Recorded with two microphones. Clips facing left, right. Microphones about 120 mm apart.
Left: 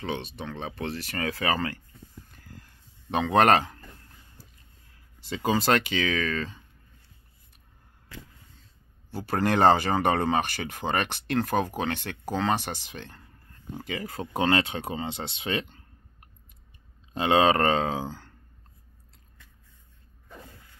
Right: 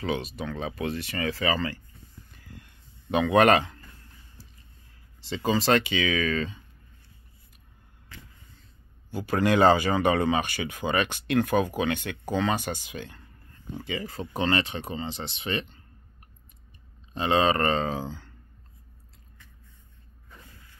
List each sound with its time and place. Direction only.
0.0 s speech: 25° left (ahead or behind)
1.1 s speech: 55° left (ahead or behind)
2.3 s a sound: 45° left (ahead or behind)
5.3 s speech: 50° left (ahead or behind)
9.1 s speech: 40° left (ahead or behind)
11.3 s speech: 35° left (ahead or behind)
13.7 s speech: 55° left (ahead or behind); by 16.3 s 90° left
17.2 s speech: 75° left (ahead or behind)
18.0 s speech: 45° left (ahead or behind)
20.2 s a sound: 60° left (ahead or behind)